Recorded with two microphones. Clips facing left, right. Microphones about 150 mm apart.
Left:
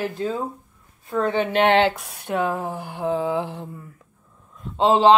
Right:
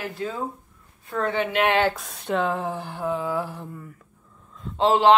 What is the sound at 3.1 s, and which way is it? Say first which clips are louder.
Speech: left 4 dB; 25° left (ahead or behind).